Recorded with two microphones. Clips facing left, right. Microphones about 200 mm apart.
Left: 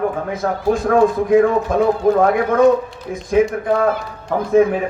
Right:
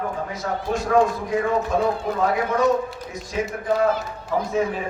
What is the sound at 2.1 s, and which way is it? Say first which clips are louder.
A man's voice: left 7 dB; 55° left (ahead or behind).